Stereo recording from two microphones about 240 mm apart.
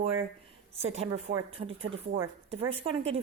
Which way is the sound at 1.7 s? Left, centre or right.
Right.